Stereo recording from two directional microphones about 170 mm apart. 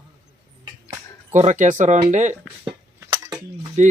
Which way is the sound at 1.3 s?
45° right (ahead or behind).